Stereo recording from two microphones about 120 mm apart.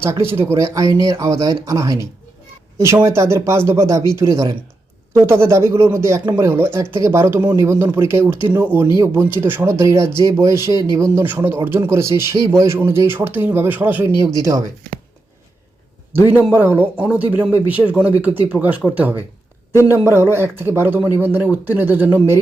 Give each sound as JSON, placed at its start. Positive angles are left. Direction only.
{"t": 0.0, "sound": "speech", "side_deg": -20}
{"t": 16.1, "sound": "speech", "side_deg": -15}